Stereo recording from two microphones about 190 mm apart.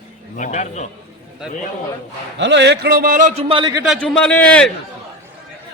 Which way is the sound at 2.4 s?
65° right (ahead or behind).